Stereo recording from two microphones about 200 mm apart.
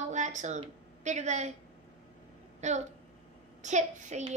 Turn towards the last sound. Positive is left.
turn(degrees=-35)  # may be behind; listen again after turning